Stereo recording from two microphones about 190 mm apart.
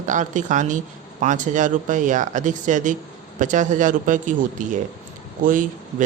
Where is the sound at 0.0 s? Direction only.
40° right (ahead or behind).